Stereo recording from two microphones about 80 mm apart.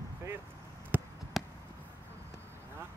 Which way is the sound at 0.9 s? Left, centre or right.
Right.